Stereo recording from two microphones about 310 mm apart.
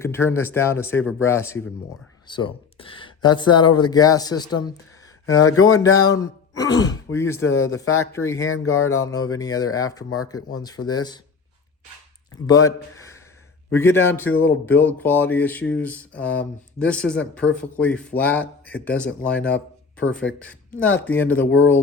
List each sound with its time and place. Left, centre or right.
0.0 s speech: centre
5.2 s speech: left
5.8 s speech: centre
8.4 s speech: left
8.9 s speech: centre
12.5 s speech: centre